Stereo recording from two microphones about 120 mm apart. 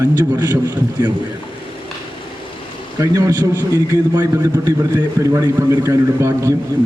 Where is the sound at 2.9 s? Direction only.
25° right (ahead or behind).